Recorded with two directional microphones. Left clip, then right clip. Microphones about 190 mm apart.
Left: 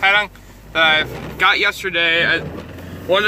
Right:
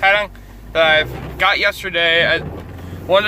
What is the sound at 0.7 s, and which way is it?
Speech, 10° right (ahead or behind).